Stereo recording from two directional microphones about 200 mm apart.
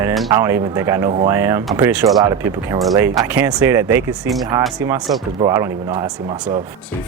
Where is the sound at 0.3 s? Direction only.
10° right (ahead or behind).